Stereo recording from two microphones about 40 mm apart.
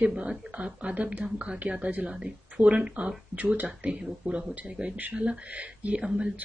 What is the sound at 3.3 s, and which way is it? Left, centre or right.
Speech, right.